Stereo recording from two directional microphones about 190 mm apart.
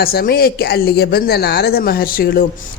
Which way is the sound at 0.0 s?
55° left (ahead or behind).